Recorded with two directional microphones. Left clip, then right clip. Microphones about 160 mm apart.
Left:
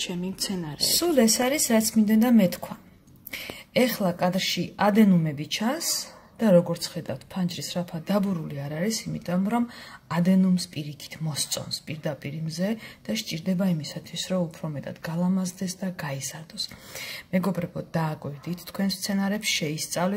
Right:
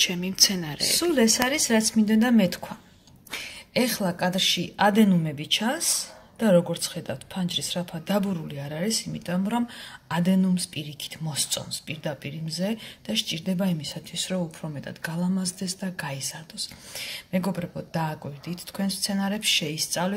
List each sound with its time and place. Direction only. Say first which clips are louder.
0.0 s speech: right 10 dB; centre (ahead or behind)
0.7 s speech: left 2 dB; 10° left (ahead or behind)